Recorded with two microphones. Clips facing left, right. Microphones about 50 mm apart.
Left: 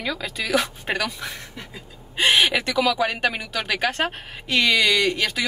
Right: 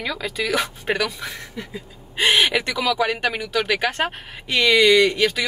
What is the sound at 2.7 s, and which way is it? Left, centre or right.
Speech, centre.